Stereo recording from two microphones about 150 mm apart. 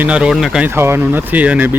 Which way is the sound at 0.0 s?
5° right (ahead or behind).